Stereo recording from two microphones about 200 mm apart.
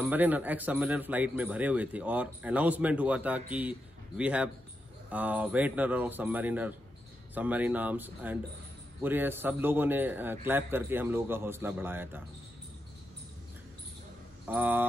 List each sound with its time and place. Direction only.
0.0 s a man's voice: 10° right (ahead or behind)
14.5 s a man's voice: 10° right (ahead or behind)